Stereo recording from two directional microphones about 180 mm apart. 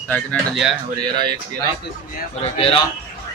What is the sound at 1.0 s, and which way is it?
Speech, 25° right (ahead or behind).